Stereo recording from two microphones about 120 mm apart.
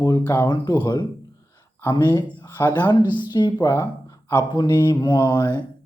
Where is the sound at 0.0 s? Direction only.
30° left (ahead or behind).